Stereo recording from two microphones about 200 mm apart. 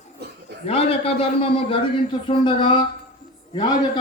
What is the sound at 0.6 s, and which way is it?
A man's voice, 30° left (ahead or behind).